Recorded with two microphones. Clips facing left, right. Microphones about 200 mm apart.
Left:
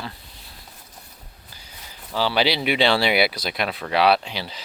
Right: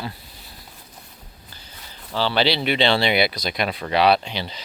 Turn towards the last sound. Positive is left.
turn(degrees=5)  # may be behind; listen again after turning